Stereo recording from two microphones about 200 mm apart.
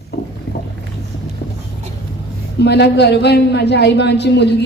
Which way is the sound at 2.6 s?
55° left (ahead or behind).